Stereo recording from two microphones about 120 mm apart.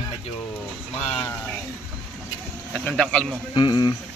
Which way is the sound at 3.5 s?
35° left (ahead or behind).